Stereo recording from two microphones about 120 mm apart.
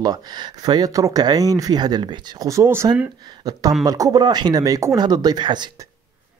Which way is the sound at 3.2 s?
35° right (ahead or behind).